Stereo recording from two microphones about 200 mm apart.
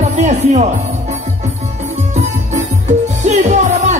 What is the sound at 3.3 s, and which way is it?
Music, 35° right (ahead or behind).